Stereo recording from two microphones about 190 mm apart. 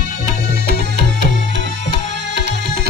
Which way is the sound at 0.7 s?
60° right (ahead or behind).